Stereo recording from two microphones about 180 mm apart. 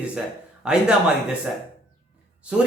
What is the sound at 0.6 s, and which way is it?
Speech, 5° right (ahead or behind).